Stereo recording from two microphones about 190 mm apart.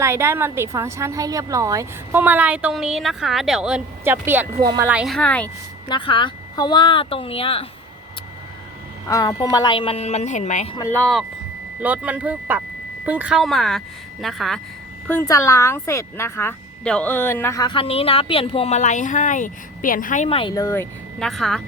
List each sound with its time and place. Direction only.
0.0 s a woman's voice: 15° right (ahead or behind)
4.6 s speech: 20° right (ahead or behind)
4.9 s speech: 5° right (ahead or behind)
5.9 s speech: 25° left (ahead or behind)
9.0 s speech: 20° left (ahead or behind); by 10.8 s 40° left (ahead or behind)
10.8 s a woman's voice: 10° left (ahead or behind)
15.0 s speech: 15° left (ahead or behind); by 20.5 s 30° left (ahead or behind)
20.5 s speech: 15° left (ahead or behind)
21.2 s speech: centre (ahead or behind)